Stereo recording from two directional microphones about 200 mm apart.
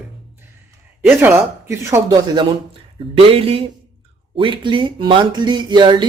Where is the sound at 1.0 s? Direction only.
10° right (ahead or behind).